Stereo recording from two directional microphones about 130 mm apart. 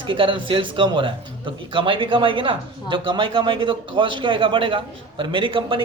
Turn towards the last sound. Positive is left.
turn(degrees=-40)  # may be behind; listen again after turning